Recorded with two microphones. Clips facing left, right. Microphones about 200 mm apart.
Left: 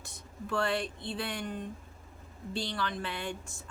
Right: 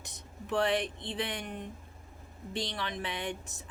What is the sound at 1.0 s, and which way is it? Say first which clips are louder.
A woman's voice: even; 20° right (ahead or behind).